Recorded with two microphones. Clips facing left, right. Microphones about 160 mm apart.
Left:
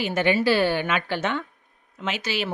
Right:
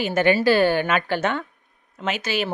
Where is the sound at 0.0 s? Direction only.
45° right (ahead or behind).